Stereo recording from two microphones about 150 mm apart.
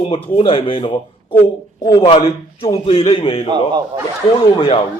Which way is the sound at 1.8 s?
20° left (ahead or behind).